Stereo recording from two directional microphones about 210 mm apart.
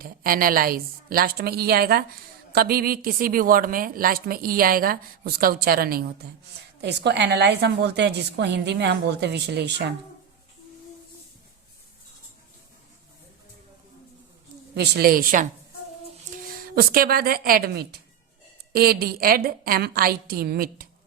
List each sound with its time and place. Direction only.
0.0 s a woman's voice: 45° right (ahead or behind)
14.8 s a woman's voice: 45° right (ahead or behind)